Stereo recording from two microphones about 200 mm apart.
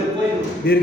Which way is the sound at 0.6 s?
50° left (ahead or behind).